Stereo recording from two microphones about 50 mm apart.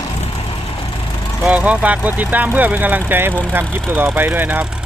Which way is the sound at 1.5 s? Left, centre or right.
Right.